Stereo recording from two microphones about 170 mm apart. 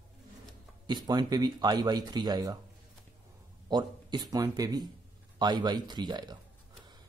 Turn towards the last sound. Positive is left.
turn(degrees=-25)  # may be behind; listen again after turning